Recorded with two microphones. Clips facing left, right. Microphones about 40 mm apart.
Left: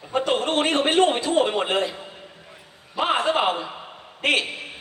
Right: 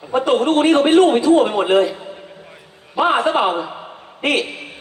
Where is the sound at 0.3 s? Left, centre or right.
Left.